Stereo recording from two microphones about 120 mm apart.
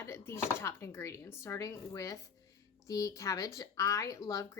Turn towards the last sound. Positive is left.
turn(degrees=25)  # may be behind; listen again after turning